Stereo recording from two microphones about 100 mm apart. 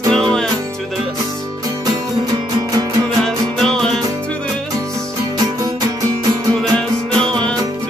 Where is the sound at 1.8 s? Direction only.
40° right (ahead or behind).